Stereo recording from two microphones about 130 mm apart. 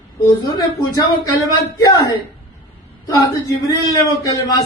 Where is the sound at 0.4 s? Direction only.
30° left (ahead or behind).